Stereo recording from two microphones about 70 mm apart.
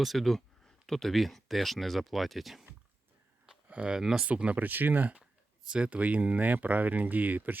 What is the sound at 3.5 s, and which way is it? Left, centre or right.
Speech, centre.